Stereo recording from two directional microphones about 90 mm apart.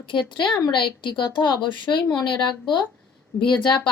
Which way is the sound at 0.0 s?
65° left (ahead or behind).